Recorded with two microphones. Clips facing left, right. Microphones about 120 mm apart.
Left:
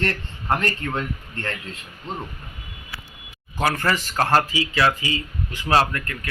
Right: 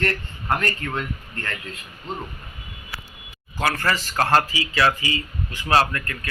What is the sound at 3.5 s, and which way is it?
Speech, 15° left (ahead or behind).